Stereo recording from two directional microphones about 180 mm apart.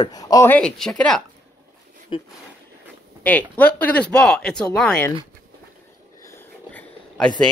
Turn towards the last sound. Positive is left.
turn(degrees=5)  # may be behind; listen again after turning